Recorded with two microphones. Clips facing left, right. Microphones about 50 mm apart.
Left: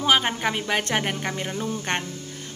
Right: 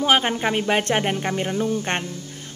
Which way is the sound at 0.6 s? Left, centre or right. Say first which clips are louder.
Right 4 dB; centre.